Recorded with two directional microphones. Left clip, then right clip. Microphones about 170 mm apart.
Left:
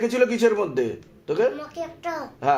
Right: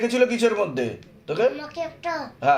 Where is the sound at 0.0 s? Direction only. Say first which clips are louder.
Even; 40° left (ahead or behind).